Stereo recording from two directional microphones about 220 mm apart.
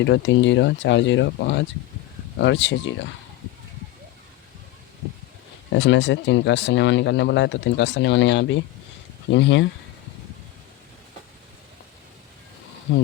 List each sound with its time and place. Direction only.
0.0 s speech: 55° left (ahead or behind)
5.7 s speech: 55° left (ahead or behind)
12.9 s speech: 55° left (ahead or behind)